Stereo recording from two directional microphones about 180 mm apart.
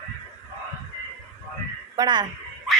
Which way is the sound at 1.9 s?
25° right (ahead or behind).